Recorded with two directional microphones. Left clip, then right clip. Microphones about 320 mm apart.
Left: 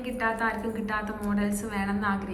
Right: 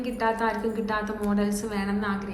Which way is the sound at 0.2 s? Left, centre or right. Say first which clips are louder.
Right 2 dB; centre.